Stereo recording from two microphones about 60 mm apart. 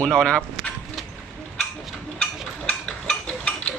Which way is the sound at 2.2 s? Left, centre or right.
Centre.